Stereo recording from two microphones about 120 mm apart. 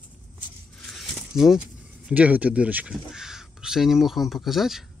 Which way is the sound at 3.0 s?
5° right (ahead or behind).